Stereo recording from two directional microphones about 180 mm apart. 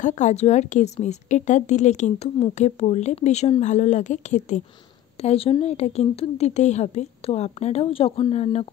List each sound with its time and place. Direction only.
0.0 s a woman's voice: 40° left (ahead or behind)